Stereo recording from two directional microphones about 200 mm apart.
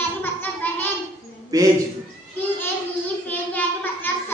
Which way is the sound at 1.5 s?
15° right (ahead or behind).